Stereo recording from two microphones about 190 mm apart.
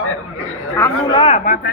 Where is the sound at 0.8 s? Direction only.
25° left (ahead or behind).